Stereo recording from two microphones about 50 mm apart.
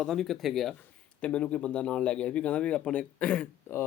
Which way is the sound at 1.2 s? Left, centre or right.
Left.